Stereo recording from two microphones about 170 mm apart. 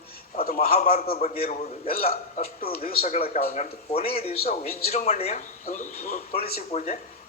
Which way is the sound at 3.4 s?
55° left (ahead or behind).